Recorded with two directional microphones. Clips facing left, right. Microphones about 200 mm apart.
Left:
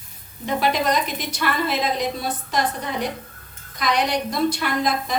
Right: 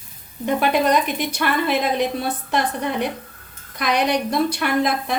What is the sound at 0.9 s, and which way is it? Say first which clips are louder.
A woman's voice: right 4 dB; 60° right (ahead or behind).